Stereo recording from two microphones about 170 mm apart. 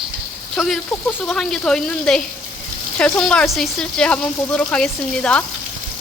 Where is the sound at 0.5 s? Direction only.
5° left (ahead or behind).